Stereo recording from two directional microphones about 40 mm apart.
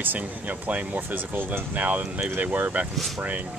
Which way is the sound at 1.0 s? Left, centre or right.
Right.